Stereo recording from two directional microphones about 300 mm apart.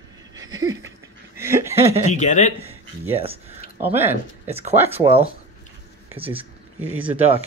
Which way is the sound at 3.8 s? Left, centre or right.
Centre.